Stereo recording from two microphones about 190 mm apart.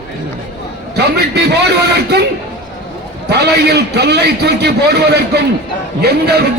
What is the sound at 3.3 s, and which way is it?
A man's voice, 60° right (ahead or behind).